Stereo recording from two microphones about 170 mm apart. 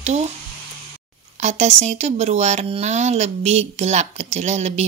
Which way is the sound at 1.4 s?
45° right (ahead or behind).